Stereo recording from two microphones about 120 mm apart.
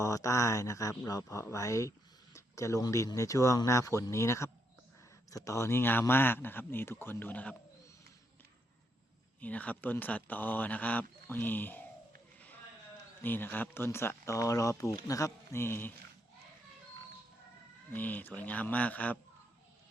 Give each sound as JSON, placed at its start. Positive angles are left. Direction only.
{"t": 0.0, "sound": "speech", "side_deg": 25}
{"t": 9.4, "sound": "speech", "side_deg": 10}
{"t": 13.2, "sound": "speech", "side_deg": 15}
{"t": 17.9, "sound": "speech", "side_deg": 15}